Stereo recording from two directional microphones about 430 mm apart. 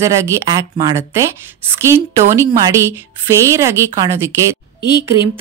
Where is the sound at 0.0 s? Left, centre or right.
Centre.